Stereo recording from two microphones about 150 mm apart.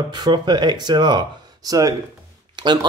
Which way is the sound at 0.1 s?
30° right (ahead or behind).